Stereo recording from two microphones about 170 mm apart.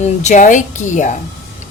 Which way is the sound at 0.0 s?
45° left (ahead or behind).